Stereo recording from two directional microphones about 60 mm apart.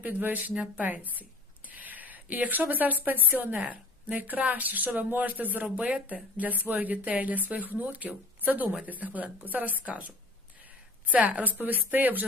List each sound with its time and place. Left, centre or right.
0.0 s speech: right
1.7 s a sound: right
3.2 s speech: right